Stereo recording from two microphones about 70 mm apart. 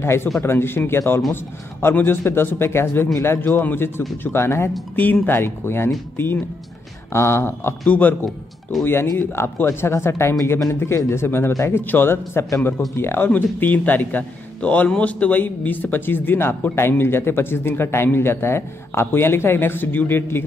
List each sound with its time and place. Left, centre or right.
0.0 s a man's voice: left
7.8 s a man's voice: left
11.8 s a man's voice: left
13.3 s a man's voice: left